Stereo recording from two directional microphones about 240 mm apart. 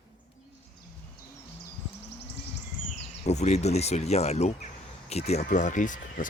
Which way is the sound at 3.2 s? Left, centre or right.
Left.